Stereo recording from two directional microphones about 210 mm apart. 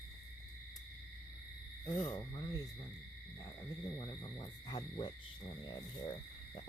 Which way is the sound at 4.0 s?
20° left (ahead or behind).